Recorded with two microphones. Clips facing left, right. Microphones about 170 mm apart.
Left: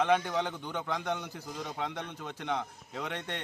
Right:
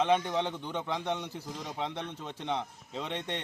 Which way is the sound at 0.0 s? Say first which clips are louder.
Even; 25° right (ahead or behind).